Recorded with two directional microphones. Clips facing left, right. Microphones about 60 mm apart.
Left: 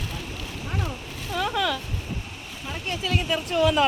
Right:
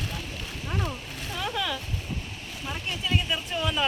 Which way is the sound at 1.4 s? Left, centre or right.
Left.